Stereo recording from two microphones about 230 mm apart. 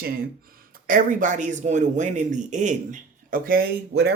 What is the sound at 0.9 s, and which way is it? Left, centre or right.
Speech, right.